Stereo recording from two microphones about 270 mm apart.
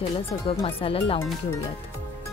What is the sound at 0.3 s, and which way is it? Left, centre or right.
Speech, left.